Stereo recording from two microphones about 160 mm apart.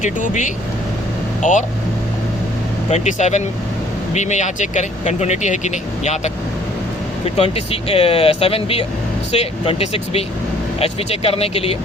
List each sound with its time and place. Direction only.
0.0 s speech: 50° left (ahead or behind)
2.9 s speech: 45° left (ahead or behind)